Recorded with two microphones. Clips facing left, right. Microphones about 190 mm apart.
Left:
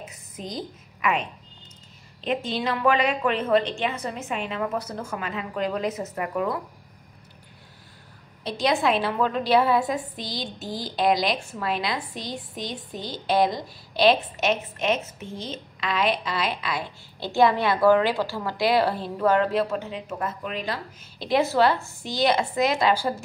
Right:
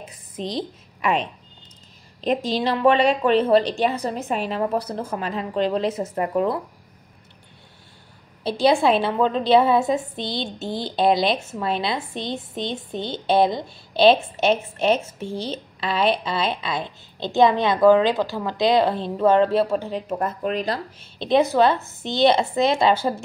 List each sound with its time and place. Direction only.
0.0 s a sound: 30° right (ahead or behind)
2.2 s a woman's voice: 35° right (ahead or behind)
8.5 s a woman's voice: 30° right (ahead or behind)
21.2 s a woman's voice: 20° right (ahead or behind)